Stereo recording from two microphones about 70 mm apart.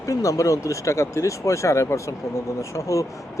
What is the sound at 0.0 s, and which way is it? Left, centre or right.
Speech, left.